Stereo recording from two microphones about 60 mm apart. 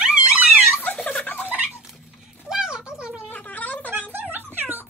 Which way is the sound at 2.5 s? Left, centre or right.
Centre.